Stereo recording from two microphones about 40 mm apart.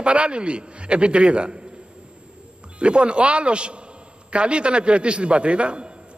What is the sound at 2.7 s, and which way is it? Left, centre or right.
A man's voice, right.